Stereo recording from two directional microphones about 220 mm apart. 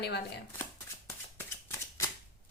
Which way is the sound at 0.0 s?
50° left (ahead or behind).